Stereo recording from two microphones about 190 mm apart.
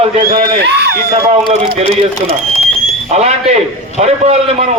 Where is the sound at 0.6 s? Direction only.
60° right (ahead or behind).